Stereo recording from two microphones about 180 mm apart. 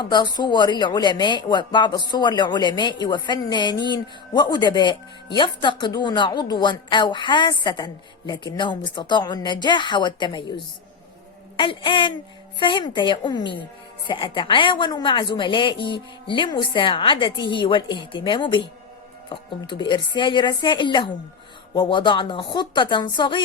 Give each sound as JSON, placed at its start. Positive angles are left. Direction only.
{"t": 0.1, "sound": "speech", "side_deg": 25}
{"t": 11.5, "sound": "speech", "side_deg": 30}